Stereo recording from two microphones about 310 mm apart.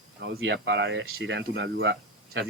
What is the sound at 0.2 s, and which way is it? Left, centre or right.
Speech, right.